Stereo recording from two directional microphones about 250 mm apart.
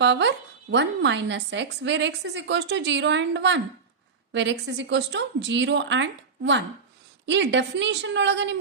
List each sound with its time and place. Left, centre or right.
0.0 s speech: right